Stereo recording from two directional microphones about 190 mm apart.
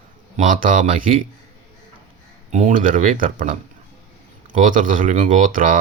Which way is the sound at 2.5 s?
40° right (ahead or behind).